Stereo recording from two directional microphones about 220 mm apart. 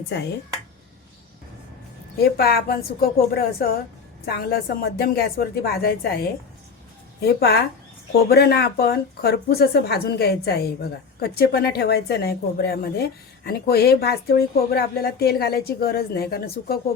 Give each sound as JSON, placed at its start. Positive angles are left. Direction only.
{"t": 2.2, "sound": "a woman's voice", "side_deg": 45}